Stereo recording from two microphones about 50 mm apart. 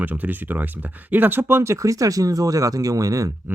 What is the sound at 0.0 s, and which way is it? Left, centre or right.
Speech, right.